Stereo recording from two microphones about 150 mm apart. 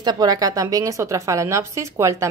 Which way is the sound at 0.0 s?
25° right (ahead or behind).